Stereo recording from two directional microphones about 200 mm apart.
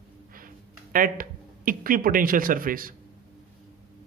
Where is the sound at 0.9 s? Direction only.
45° right (ahead or behind).